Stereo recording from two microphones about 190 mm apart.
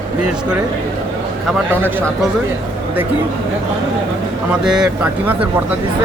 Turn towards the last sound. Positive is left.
turn(degrees=-5)  # may be behind; listen again after turning